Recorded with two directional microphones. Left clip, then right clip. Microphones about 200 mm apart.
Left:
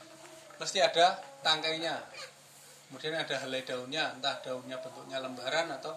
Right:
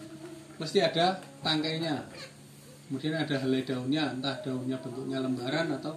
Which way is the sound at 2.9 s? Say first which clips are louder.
Right 2 dB; 50° left (ahead or behind).